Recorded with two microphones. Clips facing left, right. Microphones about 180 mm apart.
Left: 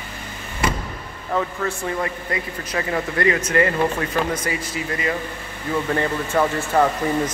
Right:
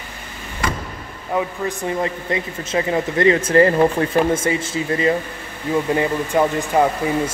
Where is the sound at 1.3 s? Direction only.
15° right (ahead or behind).